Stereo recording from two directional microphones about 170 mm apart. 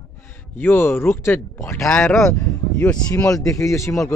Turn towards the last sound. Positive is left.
turn(degrees=15)  # may be behind; listen again after turning